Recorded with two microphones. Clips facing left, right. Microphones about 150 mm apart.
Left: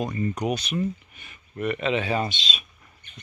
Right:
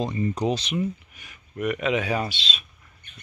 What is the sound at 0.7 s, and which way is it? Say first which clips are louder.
Speech: even; 10° right (ahead or behind).